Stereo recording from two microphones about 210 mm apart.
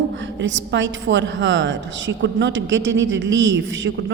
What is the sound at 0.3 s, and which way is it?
A woman's voice, 60° right (ahead or behind).